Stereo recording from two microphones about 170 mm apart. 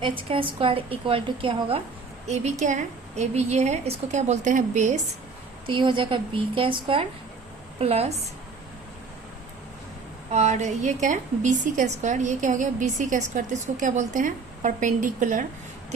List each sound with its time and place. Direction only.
0.0 s a woman's voice: 30° right (ahead or behind)
5.6 s a woman's voice: 30° right (ahead or behind)
10.3 s a woman's voice: 40° right (ahead or behind)